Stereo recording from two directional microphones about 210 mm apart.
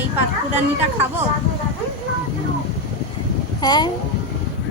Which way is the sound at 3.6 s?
20° left (ahead or behind).